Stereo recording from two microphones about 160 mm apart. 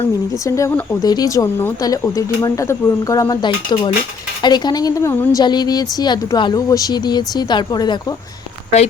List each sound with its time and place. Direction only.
0.4 s a woman's voice: 20° left (ahead or behind)